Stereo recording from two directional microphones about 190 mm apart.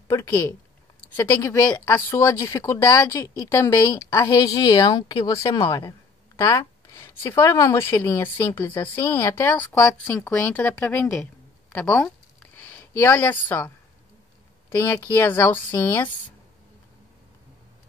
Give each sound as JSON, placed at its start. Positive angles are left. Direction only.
{"t": 0.1, "sound": "a woman's voice", "side_deg": 10}
{"t": 11.7, "sound": "a sound", "side_deg": 10}
{"t": 14.8, "sound": "a woman's voice", "side_deg": 15}